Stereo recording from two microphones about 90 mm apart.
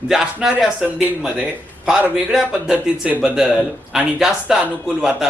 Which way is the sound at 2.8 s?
10° right (ahead or behind).